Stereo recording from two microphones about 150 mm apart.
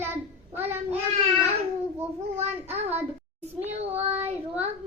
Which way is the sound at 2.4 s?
45° right (ahead or behind).